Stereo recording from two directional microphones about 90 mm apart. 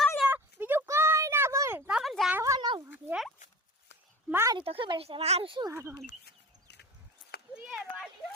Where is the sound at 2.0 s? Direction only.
Centre (ahead or behind).